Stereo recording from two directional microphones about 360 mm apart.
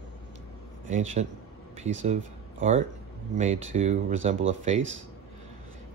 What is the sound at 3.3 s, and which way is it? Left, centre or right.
Speech, centre.